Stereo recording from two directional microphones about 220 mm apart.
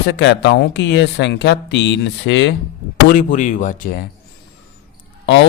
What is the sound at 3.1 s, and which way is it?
Speech, 35° left (ahead or behind).